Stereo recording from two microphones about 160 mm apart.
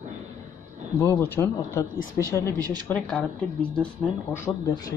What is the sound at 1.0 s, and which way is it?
Speech, 15° left (ahead or behind).